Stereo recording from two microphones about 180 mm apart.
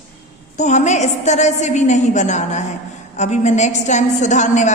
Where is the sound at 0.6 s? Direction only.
40° left (ahead or behind).